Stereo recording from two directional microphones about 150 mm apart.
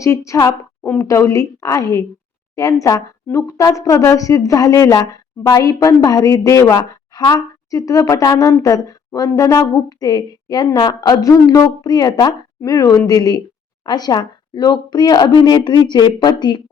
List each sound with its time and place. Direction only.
0.0 s speech: 20° left (ahead or behind)